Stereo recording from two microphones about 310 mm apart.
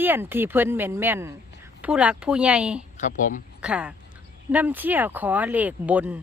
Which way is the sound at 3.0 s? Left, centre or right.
Left.